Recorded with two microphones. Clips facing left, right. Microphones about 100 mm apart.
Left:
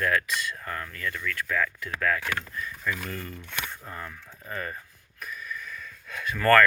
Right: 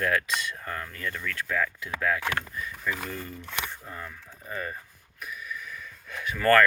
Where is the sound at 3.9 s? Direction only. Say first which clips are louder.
Left 1 dB; 5° right (ahead or behind).